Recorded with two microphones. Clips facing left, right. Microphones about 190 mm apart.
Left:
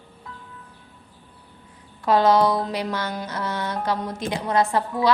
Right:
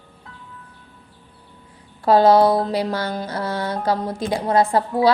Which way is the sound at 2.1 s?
30° right (ahead or behind).